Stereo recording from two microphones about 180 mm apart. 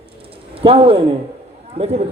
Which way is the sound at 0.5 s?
30° right (ahead or behind).